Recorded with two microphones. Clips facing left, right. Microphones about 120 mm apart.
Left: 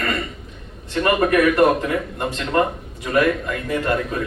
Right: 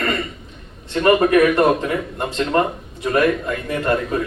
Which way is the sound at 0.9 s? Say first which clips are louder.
Right 3 dB; 25° right (ahead or behind).